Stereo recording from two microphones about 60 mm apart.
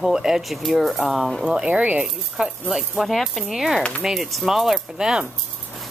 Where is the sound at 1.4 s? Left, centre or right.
Centre.